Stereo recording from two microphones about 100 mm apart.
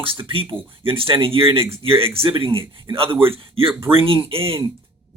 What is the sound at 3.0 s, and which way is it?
Speech, 20° right (ahead or behind).